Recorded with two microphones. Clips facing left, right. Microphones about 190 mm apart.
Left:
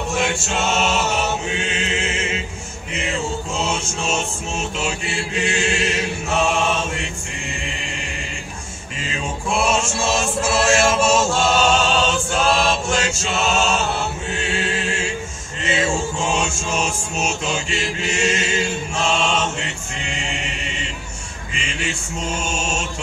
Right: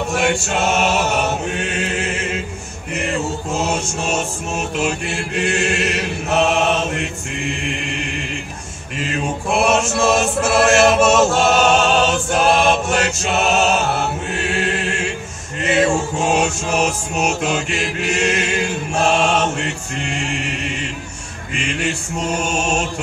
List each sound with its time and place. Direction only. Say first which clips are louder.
0.1 s choir: right 3 dB; 60° right (ahead or behind)
1.5 s chant: right 2 dB; 55° right (ahead or behind)
2.9 s music: right 3 dB; 55° right (ahead or behind)
4.7 s chant: right 4 dB; 55° right (ahead or behind)
6.9 s music: right 4 dB; 60° right (ahead or behind)
9.0 s chant: right 4 dB; 55° right (ahead or behind)
15.6 s music: right 5 dB; 55° right (ahead or behind)
21.5 s mantra: right 5 dB; 55° right (ahead or behind)